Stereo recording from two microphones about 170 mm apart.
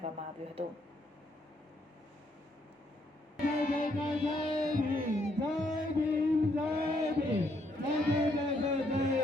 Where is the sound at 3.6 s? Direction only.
55° left (ahead or behind).